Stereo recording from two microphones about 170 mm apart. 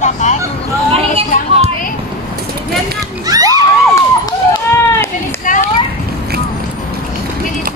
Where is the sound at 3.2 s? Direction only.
20° right (ahead or behind).